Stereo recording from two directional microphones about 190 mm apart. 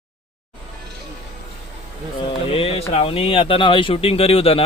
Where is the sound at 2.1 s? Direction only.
30° left (ahead or behind).